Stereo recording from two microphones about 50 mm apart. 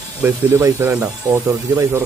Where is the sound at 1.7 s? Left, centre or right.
Right.